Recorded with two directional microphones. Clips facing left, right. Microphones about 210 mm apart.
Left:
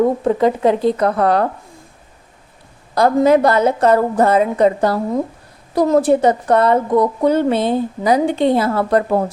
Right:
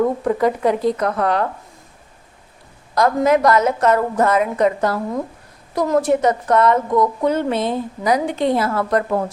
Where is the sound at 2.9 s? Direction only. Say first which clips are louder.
Left 3 dB; 30° left (ahead or behind).